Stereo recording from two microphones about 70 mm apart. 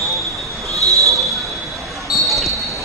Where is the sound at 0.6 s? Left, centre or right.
Right.